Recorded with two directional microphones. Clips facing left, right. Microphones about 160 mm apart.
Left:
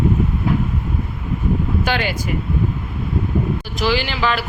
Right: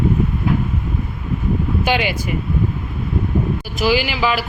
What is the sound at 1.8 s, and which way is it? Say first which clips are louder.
Speech: right 5 dB; 10° right (ahead or behind).